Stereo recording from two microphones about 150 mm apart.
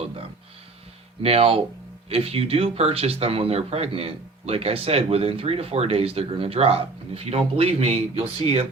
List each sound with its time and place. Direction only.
1.2 s speech: 40° right (ahead or behind)